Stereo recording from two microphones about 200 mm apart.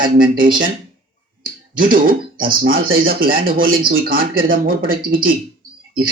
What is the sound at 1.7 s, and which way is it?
A man's voice, 45° right (ahead or behind).